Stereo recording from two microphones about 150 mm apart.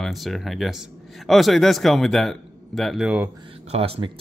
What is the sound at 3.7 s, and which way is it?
Speech, 40° right (ahead or behind).